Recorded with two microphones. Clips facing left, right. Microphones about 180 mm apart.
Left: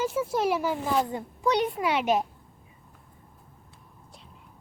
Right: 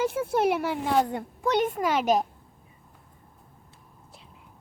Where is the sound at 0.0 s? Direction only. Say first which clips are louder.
Right 2 dB; 60° right (ahead or behind); by 2.2 s 40° right (ahead or behind).